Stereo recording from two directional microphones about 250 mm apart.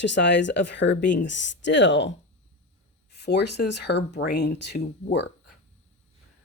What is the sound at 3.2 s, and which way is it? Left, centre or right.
Speech, left.